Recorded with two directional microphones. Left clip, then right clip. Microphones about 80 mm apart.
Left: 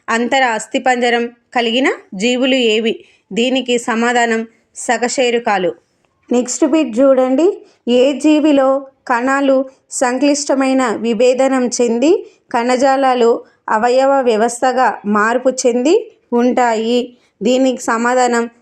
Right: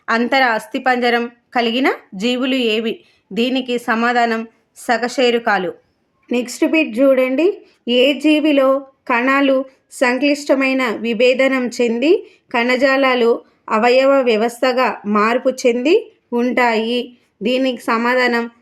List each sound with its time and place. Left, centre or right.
0.3 s speech: left
7.9 s speech: left
11.9 s speech: left
16.6 s a woman's voice: left